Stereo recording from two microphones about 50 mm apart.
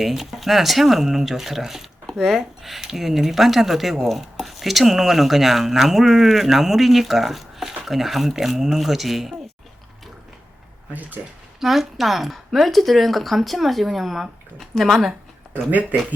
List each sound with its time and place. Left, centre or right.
0.0 s speech: centre
11.6 s speech: centre
15.7 s speech: right